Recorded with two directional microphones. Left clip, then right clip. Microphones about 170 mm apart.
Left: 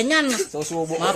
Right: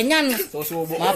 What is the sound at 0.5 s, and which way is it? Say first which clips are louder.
Speech: left 1 dB; 15° left (ahead or behind).